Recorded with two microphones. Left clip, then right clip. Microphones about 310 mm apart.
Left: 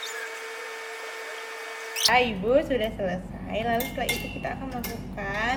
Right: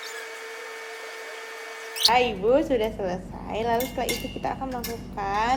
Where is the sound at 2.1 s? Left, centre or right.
Centre.